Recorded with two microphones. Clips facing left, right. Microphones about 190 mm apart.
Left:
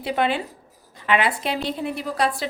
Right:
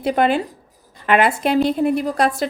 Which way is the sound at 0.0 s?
45° right (ahead or behind).